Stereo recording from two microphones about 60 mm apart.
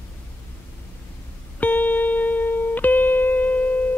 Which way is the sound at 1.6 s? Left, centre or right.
Left.